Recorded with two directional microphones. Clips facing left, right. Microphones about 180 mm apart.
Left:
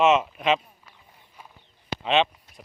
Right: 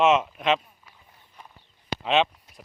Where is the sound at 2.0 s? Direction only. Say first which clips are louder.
Even; centre (ahead or behind).